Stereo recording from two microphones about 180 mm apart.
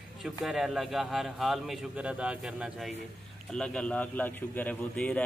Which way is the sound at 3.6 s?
5° left (ahead or behind).